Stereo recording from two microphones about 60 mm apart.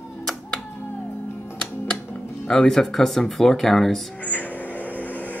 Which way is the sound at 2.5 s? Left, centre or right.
Centre.